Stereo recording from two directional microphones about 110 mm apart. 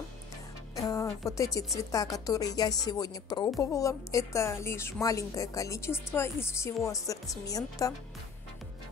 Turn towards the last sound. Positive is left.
turn(degrees=30)  # may be behind; listen again after turning